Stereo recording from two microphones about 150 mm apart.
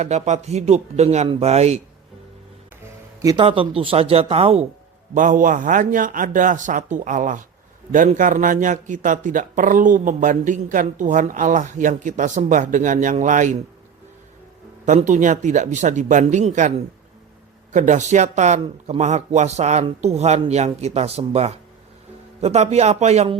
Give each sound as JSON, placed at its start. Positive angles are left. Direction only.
{"t": 0.0, "sound": "speech", "side_deg": -50}
{"t": 3.3, "sound": "speech", "side_deg": -35}
{"t": 5.1, "sound": "a man's voice", "side_deg": -60}
{"t": 14.8, "sound": "speech", "side_deg": -55}